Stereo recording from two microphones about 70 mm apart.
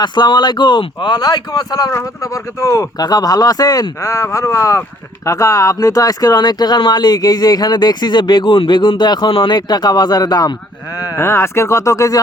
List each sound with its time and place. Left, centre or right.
0.0 s speech: left
2.3 s speech: left
3.0 s speech: left
4.0 s speech: left
11.2 s speech: left